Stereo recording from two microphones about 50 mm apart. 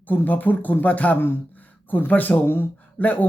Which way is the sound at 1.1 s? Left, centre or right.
Left.